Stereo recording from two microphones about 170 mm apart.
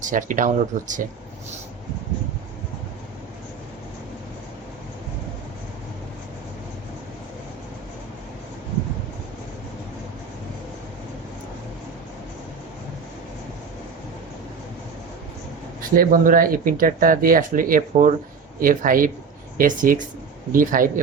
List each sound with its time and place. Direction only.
0.0 s speech: 50° right (ahead or behind)
16.0 s speech: 55° right (ahead or behind)